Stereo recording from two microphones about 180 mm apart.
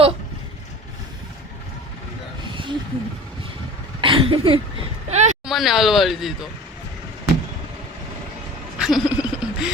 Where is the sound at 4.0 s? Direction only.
30° right (ahead or behind).